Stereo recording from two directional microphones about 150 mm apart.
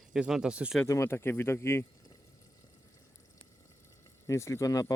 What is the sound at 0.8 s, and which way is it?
Speech, 20° left (ahead or behind).